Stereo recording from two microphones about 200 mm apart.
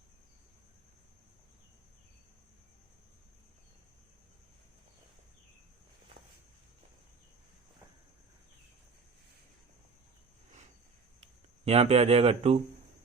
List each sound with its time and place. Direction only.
11.6 s speech: 30° right (ahead or behind)